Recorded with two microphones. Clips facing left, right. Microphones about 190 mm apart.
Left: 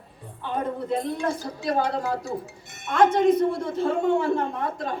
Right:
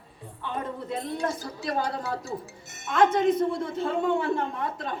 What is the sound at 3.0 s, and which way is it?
A woman's voice, 50° left (ahead or behind).